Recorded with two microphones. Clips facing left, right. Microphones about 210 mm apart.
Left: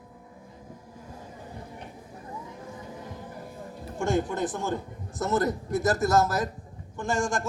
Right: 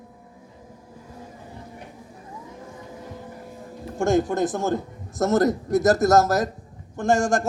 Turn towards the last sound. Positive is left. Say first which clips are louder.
# right 7 dB
turn(degrees=-45)  # may be behind; listen again after turning